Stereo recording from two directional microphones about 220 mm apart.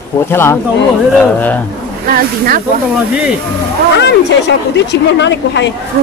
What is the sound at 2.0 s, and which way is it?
Speech, 40° right (ahead or behind).